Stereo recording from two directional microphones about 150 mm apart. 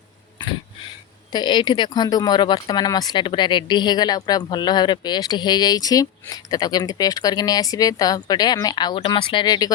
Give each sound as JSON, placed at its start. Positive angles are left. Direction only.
{"t": 1.3, "sound": "speech", "side_deg": 30}